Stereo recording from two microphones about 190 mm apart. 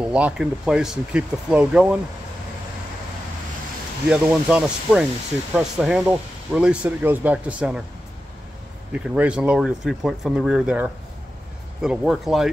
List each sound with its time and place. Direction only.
0.0 s speech: 5° right (ahead or behind)
4.1 s speech: 5° right (ahead or behind)
8.9 s speech: 5° right (ahead or behind)